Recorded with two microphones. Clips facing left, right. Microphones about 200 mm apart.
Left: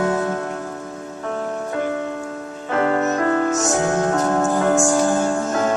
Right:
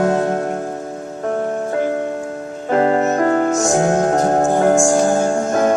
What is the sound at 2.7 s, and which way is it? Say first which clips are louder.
Music: right 4 dB; 30° right (ahead or behind).